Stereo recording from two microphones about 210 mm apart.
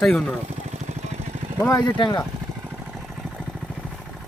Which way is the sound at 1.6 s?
15° left (ahead or behind).